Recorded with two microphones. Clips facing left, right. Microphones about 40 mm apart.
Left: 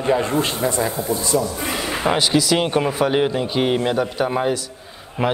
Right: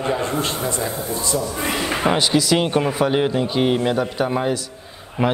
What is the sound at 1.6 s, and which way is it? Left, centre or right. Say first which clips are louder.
Speech: right 2 dB; right.